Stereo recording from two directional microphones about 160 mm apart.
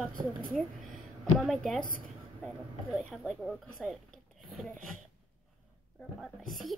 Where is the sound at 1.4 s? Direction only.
Centre (ahead or behind).